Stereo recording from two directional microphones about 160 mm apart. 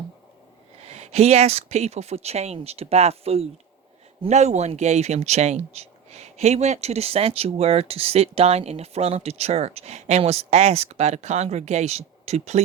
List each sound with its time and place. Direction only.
0.8 s speech: 40° right (ahead or behind)